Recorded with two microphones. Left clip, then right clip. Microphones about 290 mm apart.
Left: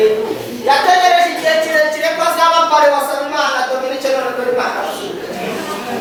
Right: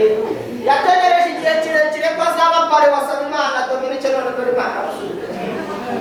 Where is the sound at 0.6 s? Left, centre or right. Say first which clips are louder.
Left 2 dB; centre.